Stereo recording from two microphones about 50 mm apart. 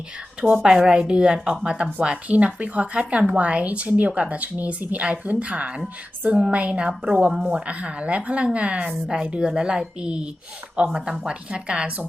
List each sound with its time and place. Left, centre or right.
0.6 s speech: centre